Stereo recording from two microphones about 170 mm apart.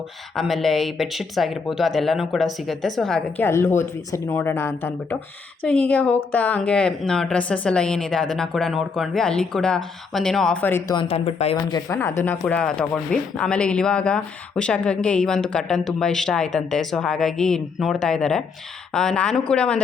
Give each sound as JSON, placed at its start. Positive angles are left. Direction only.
{"t": 0.3, "sound": "speech", "side_deg": 0}
{"t": 10.9, "sound": "speech", "side_deg": 35}